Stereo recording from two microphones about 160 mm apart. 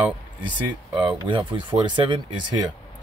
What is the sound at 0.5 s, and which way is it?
Speech, 30° right (ahead or behind).